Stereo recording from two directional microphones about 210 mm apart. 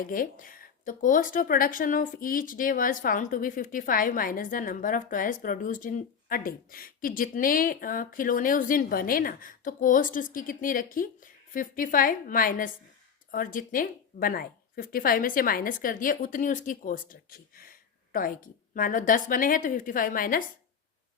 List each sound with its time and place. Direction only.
0.0 s speech: 40° left (ahead or behind)